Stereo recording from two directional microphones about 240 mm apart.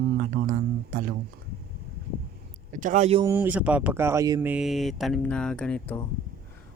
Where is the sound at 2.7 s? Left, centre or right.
Right.